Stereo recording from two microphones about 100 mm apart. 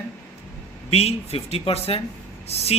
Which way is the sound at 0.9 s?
85° left.